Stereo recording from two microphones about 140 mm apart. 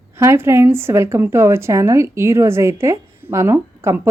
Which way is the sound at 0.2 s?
20° right (ahead or behind).